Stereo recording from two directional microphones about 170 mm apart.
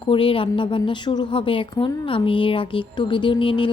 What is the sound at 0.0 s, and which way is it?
A woman's voice, 30° left (ahead or behind).